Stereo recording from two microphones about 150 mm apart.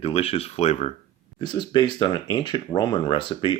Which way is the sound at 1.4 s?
30° left (ahead or behind).